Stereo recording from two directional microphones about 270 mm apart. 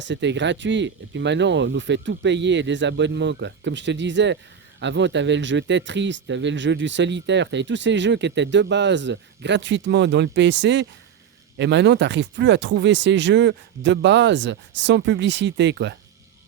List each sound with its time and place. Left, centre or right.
0.0 s speech: right